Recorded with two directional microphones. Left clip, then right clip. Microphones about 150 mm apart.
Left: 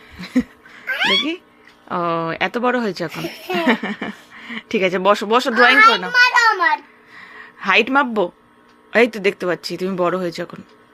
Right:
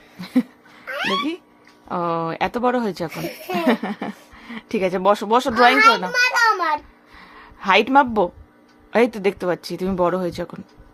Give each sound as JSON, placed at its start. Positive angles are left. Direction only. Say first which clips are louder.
{"t": 0.2, "sound": "laughter", "louder": "left 1 dB", "side_deg": -5}
{"t": 1.0, "sound": "speech", "louder": "left 5 dB", "side_deg": 0}
{"t": 3.2, "sound": "speech", "louder": "left 1 dB", "side_deg": -20}
{"t": 3.5, "sound": "speech", "louder": "left 2 dB", "side_deg": 0}
{"t": 6.1, "sound": "a sound", "louder": "left 4 dB", "side_deg": -30}
{"t": 7.1, "sound": "a sound", "louder": "left 6 dB", "side_deg": -15}
{"t": 8.9, "sound": "speech", "louder": "left 3 dB", "side_deg": -15}